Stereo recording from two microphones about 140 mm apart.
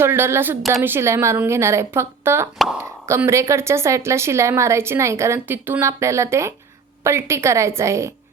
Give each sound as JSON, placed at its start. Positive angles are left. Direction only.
{"t": 0.0, "sound": "speech", "side_deg": -15}